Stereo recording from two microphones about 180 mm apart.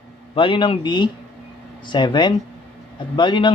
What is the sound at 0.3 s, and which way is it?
Speech, 25° left (ahead or behind).